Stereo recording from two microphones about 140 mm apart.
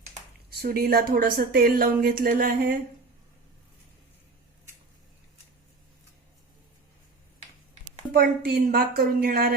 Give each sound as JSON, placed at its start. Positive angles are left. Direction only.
{"t": 0.6, "sound": "speech", "side_deg": -90}
{"t": 8.1, "sound": "speech", "side_deg": -90}